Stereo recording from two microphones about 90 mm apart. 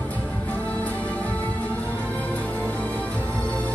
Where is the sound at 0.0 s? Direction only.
15° left (ahead or behind).